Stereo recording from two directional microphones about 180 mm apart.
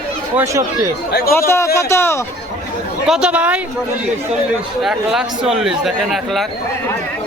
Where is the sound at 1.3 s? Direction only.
15° left (ahead or behind).